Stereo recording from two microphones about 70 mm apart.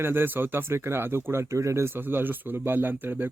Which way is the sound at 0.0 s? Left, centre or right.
Right.